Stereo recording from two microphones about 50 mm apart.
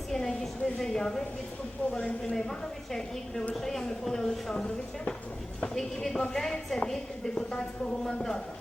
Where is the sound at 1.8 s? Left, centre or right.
Left.